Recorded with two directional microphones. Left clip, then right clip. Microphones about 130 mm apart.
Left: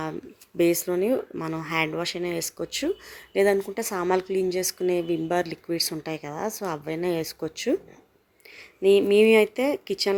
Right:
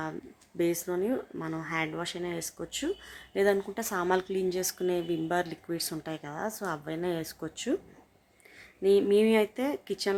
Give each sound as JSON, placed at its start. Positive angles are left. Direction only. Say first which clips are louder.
{"t": 0.5, "sound": "a woman's voice", "louder": "left 7 dB", "side_deg": 30}
{"t": 8.8, "sound": "speech", "louder": "left 5 dB", "side_deg": 20}